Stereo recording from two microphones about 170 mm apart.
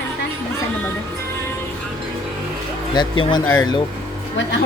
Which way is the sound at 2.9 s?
30° left (ahead or behind).